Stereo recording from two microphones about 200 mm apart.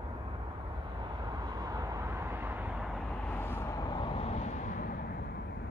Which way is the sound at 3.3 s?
10° left (ahead or behind).